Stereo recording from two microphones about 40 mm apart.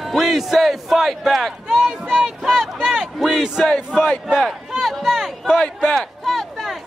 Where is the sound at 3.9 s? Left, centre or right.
Centre.